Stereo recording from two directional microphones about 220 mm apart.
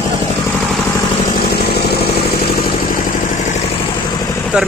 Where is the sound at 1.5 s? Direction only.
45° left (ahead or behind).